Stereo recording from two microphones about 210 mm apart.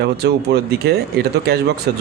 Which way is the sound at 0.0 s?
50° right (ahead or behind).